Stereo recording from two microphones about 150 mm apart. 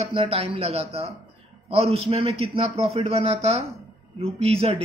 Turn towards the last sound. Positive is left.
turn(degrees=-40)  # may be behind; listen again after turning